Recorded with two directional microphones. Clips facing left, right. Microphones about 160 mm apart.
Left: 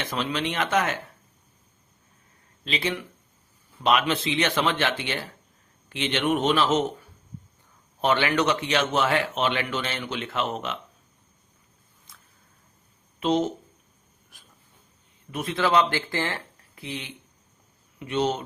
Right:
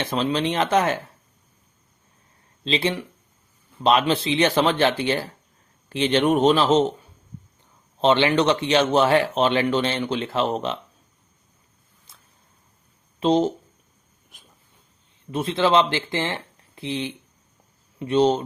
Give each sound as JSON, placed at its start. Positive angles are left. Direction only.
{"t": 0.0, "sound": "speech", "side_deg": -30}
{"t": 2.6, "sound": "speech", "side_deg": -30}
{"t": 12.1, "sound": "a sound", "side_deg": -30}
{"t": 13.1, "sound": "speech", "side_deg": -30}
{"t": 14.3, "sound": "a sound", "side_deg": -20}
{"t": 15.3, "sound": "speech", "side_deg": -25}